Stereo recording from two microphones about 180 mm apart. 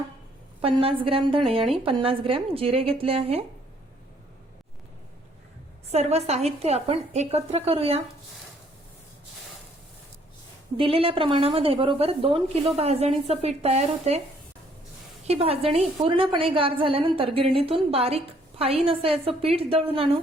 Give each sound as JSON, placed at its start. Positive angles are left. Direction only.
{"t": 0.6, "sound": "a woman's voice", "side_deg": -30}
{"t": 5.9, "sound": "a woman's voice", "side_deg": -35}
{"t": 10.8, "sound": "a woman's voice", "side_deg": -30}
{"t": 15.3, "sound": "a woman's voice", "side_deg": -35}